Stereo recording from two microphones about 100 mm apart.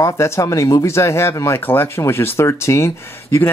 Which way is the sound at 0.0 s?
30° left (ahead or behind).